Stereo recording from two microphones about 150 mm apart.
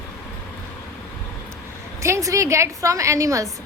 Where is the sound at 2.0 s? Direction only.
20° right (ahead or behind).